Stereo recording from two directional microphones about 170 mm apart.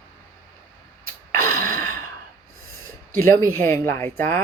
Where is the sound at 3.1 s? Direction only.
15° left (ahead or behind).